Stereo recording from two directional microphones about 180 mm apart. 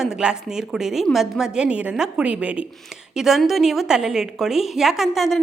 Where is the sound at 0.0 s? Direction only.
5° right (ahead or behind).